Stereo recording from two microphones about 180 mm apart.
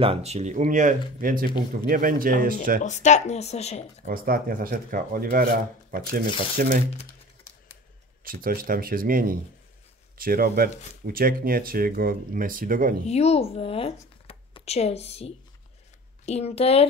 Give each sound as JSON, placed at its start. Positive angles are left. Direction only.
{"t": 0.0, "sound": "speech", "side_deg": -35}
{"t": 2.8, "sound": "speech", "side_deg": 40}
{"t": 4.0, "sound": "speech", "side_deg": -55}
{"t": 8.2, "sound": "speech", "side_deg": -50}
{"t": 13.0, "sound": "speech", "side_deg": 35}